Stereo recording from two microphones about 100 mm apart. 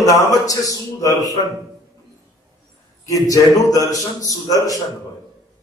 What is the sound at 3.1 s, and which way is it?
A man's voice, 35° left (ahead or behind).